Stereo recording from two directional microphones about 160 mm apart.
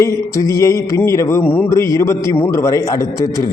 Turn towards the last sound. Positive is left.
turn(degrees=20)  # may be behind; listen again after turning